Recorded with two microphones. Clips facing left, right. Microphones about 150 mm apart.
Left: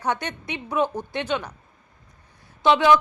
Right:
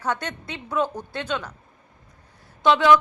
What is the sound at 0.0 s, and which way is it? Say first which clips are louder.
A woman's voice: left 1 dB; 15° left (ahead or behind).